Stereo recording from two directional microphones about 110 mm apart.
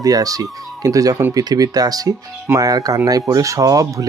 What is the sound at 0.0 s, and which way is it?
Speech, 35° right (ahead or behind).